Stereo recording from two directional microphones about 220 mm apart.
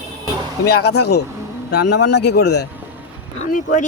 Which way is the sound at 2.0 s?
50° left (ahead or behind).